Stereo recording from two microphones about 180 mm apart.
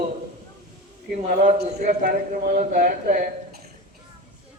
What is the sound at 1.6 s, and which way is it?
Speech, 40° right (ahead or behind).